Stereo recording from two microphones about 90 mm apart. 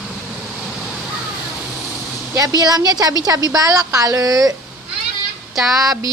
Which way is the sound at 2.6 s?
50° right (ahead or behind).